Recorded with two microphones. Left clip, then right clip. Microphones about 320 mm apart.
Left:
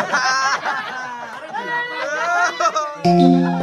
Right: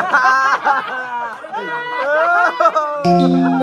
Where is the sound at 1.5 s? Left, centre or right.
Centre.